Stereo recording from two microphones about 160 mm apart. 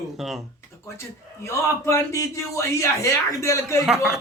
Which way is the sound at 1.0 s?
15° left (ahead or behind).